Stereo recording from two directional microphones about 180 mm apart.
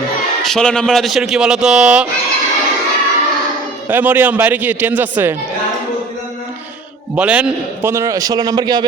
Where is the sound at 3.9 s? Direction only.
10° right (ahead or behind).